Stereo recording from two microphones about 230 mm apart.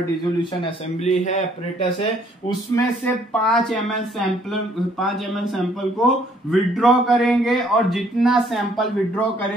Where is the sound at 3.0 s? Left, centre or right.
Centre.